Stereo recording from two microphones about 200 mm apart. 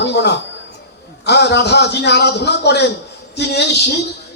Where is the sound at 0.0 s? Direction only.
55° left (ahead or behind).